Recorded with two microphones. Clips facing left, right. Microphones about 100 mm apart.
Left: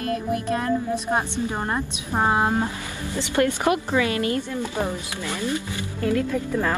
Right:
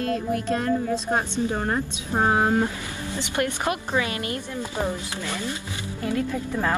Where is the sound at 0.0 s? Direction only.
15° left (ahead or behind).